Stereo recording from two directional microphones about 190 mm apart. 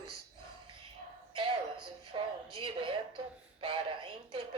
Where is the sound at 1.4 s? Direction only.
25° right (ahead or behind).